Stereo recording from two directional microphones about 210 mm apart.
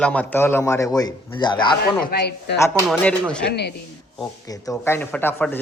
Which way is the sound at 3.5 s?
50° left (ahead or behind).